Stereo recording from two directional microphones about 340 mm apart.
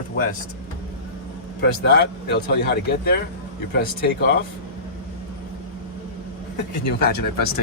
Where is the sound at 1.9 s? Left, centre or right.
Left.